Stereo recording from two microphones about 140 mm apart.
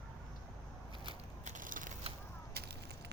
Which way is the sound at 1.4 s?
65° right (ahead or behind).